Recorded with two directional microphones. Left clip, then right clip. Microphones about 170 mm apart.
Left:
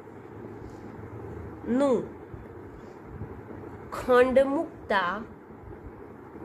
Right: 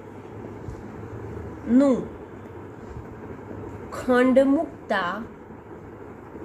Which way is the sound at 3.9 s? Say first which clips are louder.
Right 1 dB; 50° left (ahead or behind).